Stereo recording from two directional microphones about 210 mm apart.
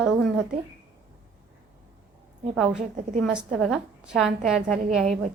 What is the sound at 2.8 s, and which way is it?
Speech, 35° right (ahead or behind).